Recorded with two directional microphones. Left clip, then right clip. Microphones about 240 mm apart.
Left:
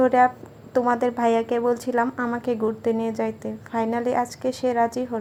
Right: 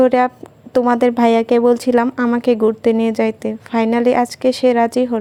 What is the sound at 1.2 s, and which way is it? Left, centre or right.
Speech, right.